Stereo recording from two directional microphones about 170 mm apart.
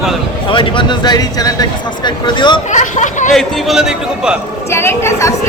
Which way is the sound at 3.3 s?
Centre (ahead or behind).